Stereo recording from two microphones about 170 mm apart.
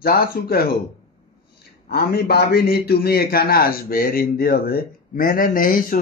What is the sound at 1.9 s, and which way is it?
A man's voice, 65° left (ahead or behind).